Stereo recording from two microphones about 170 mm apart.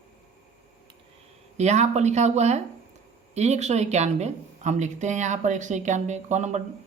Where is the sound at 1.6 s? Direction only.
40° right (ahead or behind).